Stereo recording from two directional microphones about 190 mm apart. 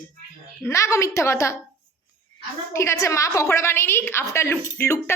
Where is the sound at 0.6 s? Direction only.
15° left (ahead or behind).